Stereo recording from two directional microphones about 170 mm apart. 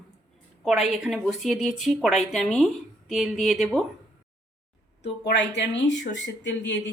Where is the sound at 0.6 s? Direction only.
5° right (ahead or behind).